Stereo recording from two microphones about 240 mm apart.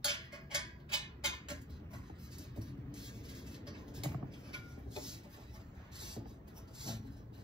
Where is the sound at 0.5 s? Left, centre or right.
Centre.